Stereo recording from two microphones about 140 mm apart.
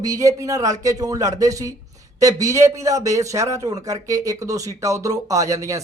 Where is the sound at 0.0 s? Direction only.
25° right (ahead or behind).